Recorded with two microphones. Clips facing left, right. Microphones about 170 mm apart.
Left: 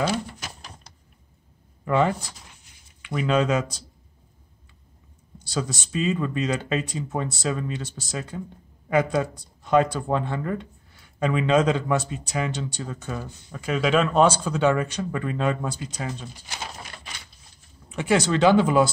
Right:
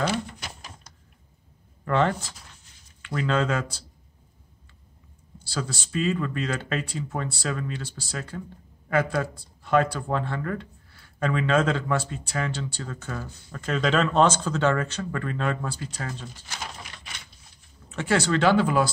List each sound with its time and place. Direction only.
1.9 s speech: 10° left (ahead or behind)
5.4 s speech: 20° left (ahead or behind)
17.8 s speech: 15° left (ahead or behind)